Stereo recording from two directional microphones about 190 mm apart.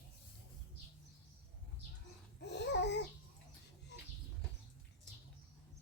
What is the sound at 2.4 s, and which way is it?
Babbling, 65° left (ahead or behind).